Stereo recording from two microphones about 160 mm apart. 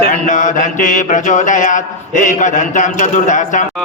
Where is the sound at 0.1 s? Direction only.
50° left (ahead or behind).